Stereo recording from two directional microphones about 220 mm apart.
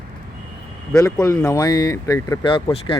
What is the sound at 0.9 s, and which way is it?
Speech, 15° left (ahead or behind).